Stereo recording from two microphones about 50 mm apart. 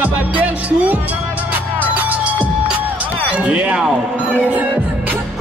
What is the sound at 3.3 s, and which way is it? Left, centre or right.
Speech, right.